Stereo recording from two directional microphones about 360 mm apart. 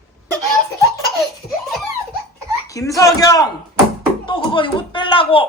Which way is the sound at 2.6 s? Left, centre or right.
Centre.